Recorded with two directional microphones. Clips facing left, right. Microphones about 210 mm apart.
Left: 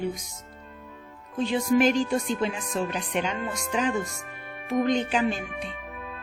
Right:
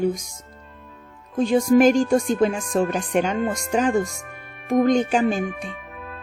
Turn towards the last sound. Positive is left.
turn(degrees=-45)  # may be behind; listen again after turning